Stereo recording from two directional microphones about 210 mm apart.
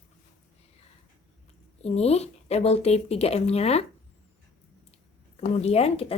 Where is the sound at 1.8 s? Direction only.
30° left (ahead or behind).